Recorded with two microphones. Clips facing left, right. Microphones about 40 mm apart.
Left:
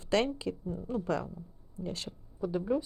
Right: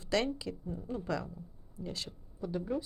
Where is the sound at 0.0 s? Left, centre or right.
Left.